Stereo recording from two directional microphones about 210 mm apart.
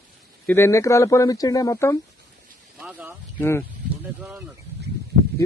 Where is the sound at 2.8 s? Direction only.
5° right (ahead or behind).